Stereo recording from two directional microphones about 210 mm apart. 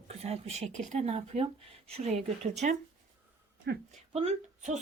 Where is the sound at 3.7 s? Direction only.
55° right (ahead or behind).